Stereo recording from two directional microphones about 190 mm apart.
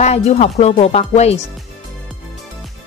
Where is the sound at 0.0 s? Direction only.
35° left (ahead or behind).